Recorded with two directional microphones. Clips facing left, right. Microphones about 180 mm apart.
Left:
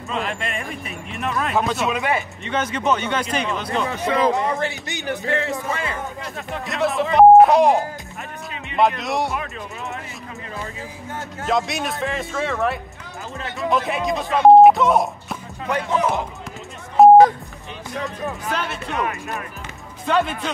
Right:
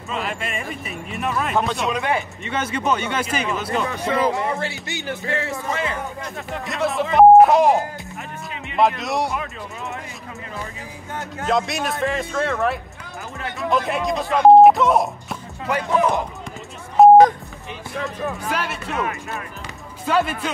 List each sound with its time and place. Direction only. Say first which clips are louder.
0.1 s speech: left 1 dB; 5° right (ahead or behind)
2.4 s speech: left 3 dB; 10° right (ahead or behind)
4.3 s speech: left 2 dB; 20° left (ahead or behind)
6.6 s speech: left 1 dB; centre (ahead or behind)
11.4 s speech: right 1 dB; centre (ahead or behind)
17.0 s a sound: even; centre (ahead or behind)
18.0 s speech: right 2 dB; centre (ahead or behind)
20.1 s speech: even; 5° right (ahead or behind)